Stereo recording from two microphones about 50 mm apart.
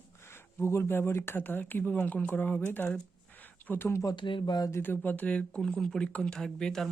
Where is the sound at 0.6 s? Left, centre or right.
Left.